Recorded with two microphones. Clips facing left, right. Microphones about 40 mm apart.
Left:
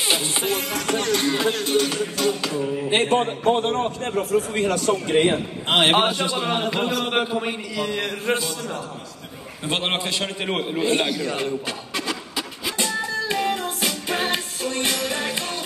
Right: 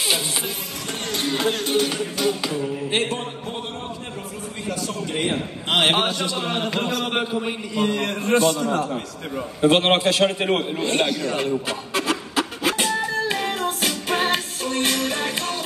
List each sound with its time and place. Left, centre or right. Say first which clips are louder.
0.5 s music: left 7 dB; left
1.2 s music: left 1 dB; centre
2.9 s a man's voice: left 6 dB; left
3.4 s a man's voice: left 10 dB; left
5.1 s a man's voice: left 4 dB; left
5.8 s a man's voice: left 2 dB; centre
8.3 s a man's voice: right 8 dB; right
9.6 s a man's voice: right 9 dB; right
9.9 s a man's voice: right 6 dB; right
10.5 s a man's voice: even; centre
11.9 s music: right 6 dB; right
13.3 s music: even; centre